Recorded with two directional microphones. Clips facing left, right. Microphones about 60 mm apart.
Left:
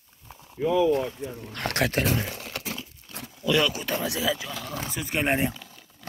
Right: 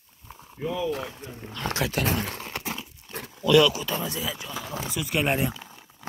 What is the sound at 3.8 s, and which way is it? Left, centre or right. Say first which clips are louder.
Speech: left 3 dB; left.